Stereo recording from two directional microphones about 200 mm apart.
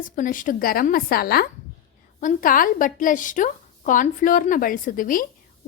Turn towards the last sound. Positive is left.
turn(degrees=45)  # may be behind; listen again after turning